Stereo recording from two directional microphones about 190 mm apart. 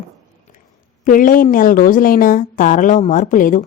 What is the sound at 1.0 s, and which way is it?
Speech, 45° left (ahead or behind).